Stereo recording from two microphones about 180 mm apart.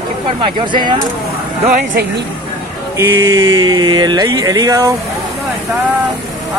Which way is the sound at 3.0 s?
15° right (ahead or behind).